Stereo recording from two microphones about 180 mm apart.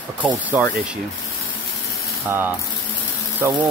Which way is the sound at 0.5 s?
10° right (ahead or behind).